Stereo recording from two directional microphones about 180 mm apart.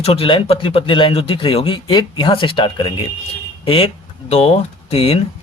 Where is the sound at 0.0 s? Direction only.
30° left (ahead or behind).